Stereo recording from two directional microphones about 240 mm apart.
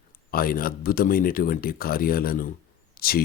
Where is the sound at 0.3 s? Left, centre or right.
Left.